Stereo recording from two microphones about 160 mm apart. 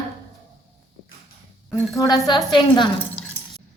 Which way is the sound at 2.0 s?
25° left (ahead or behind).